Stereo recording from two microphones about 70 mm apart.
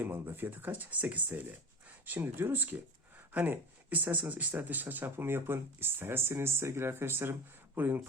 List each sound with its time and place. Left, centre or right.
0.0 s speech: right